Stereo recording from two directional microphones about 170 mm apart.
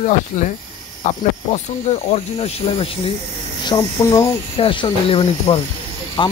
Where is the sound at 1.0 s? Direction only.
40° left (ahead or behind).